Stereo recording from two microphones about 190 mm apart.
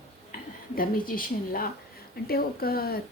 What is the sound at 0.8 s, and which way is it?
A woman's voice, 50° left (ahead or behind).